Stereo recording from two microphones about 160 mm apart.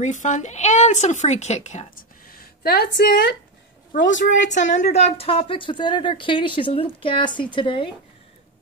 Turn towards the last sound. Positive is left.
turn(degrees=35)  # may be behind; listen again after turning